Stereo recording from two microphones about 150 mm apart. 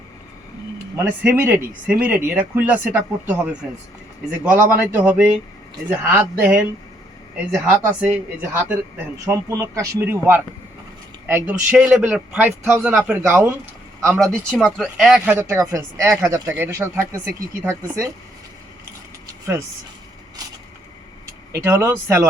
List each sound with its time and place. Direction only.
0.9 s speech: 15° right (ahead or behind)
11.8 s speech: 5° right (ahead or behind)
14.1 s speech: centre (ahead or behind)
15.2 s speech: 15° right (ahead or behind)
21.5 s speech: 20° right (ahead or behind)